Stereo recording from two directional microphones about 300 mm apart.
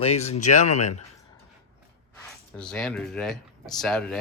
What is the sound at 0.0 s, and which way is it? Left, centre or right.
Speech, left.